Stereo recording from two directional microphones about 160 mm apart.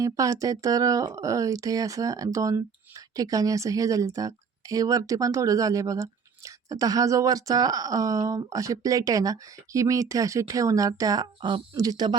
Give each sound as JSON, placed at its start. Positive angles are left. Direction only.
{"t": 0.0, "sound": "a woman's voice", "side_deg": -20}